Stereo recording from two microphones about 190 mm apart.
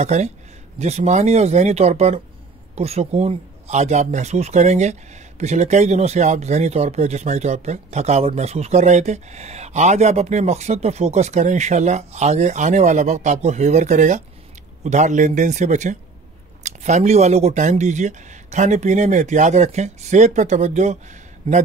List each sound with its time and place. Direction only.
0.0 s speech: 35° right (ahead or behind)